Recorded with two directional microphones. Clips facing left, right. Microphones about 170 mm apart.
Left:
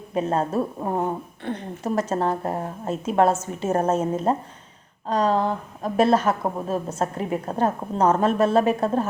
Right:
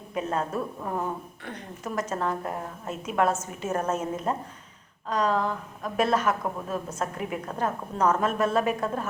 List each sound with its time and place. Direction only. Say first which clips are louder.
0.1 s a woman's voice: left 6 dB; 35° left (ahead or behind)